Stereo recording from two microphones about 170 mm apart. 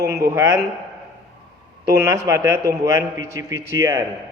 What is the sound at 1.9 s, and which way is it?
A man's voice, 15° right (ahead or behind).